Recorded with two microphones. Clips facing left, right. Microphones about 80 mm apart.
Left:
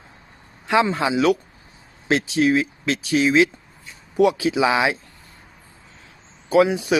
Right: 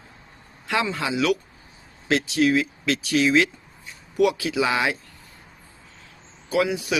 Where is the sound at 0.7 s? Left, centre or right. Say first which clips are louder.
Left 6 dB; left.